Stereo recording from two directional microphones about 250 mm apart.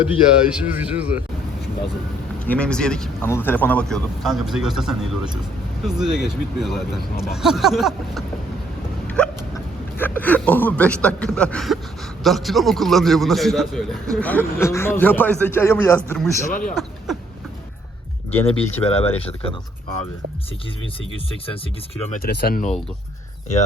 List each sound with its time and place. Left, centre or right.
0.1 s a man's voice: centre
2.5 s a man's voice: centre
9.2 s hiccup: centre
10.0 s a man's voice: centre
16.5 s speech: left
18.3 s speech: left
22.1 s speech: left